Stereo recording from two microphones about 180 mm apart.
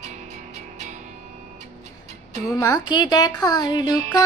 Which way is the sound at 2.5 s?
20° left (ahead or behind).